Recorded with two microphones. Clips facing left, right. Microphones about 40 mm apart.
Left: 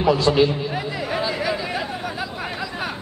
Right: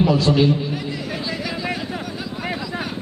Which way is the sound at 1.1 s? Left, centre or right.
Centre.